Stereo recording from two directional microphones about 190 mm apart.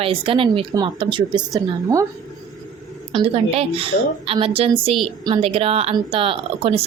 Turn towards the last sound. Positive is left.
turn(degrees=-30)  # may be behind; listen again after turning